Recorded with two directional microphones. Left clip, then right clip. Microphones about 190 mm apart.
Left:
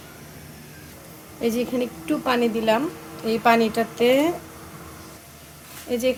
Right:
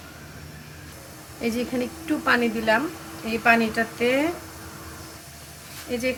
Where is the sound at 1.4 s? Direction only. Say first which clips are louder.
Left 3 dB; 10° left (ahead or behind).